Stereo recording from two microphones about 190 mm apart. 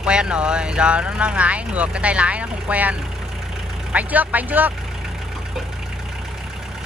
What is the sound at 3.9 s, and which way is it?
Speech, 10° right (ahead or behind).